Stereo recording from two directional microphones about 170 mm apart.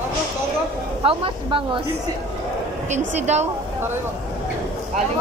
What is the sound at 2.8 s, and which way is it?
Speech, 45° right (ahead or behind).